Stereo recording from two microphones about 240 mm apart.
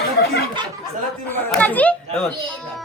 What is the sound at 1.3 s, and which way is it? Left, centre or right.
Speech, centre.